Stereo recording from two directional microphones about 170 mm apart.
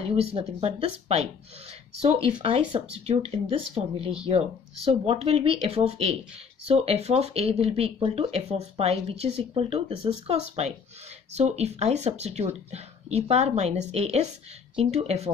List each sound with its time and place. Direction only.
0.1 s speech: 35° right (ahead or behind)